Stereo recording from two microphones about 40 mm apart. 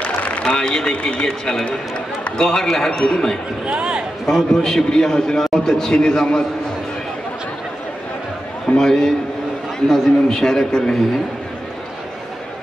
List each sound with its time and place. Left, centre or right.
0.4 s a man's voice: centre
3.6 s speech: right
4.3 s a man's voice: centre
8.7 s a man's voice: centre